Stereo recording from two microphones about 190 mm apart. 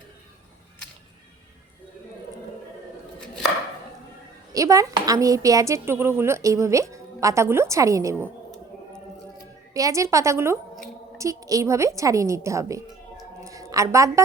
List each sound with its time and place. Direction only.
4.5 s a woman's voice: 15° right (ahead or behind)
9.7 s a woman's voice: 15° right (ahead or behind)